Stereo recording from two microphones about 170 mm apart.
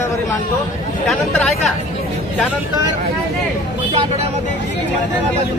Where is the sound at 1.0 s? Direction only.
Centre (ahead or behind).